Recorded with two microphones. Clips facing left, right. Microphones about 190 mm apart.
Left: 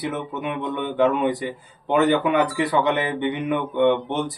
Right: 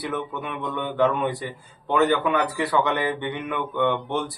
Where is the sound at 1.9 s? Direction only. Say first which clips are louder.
Left 2 dB; 20° left (ahead or behind).